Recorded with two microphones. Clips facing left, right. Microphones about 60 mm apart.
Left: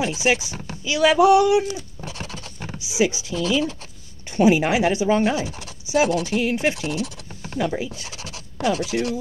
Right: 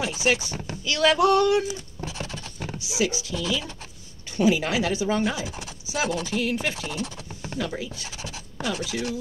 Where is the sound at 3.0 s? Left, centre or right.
Left.